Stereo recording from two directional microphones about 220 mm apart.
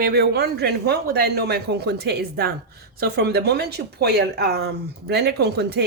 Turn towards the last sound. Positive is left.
turn(degrees=-50)  # may be behind; listen again after turning